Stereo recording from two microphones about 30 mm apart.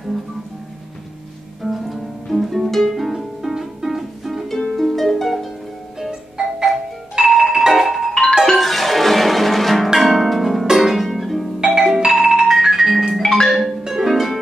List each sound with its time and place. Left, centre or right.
1.6 s music: centre
4.5 s harp: centre
5.9 s music: centre
7.6 s marimba: centre
8.1 s music: centre
8.5 s music: centre
9.9 s harp: centre
12.1 s music: centre
13.2 s marimba: centre
13.5 s marimba: centre
13.8 s music: centre
14.1 s harp: centre